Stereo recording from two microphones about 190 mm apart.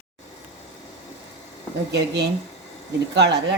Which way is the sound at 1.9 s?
65° right (ahead or behind).